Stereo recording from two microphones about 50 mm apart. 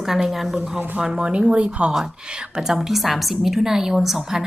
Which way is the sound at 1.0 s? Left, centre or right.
Centre.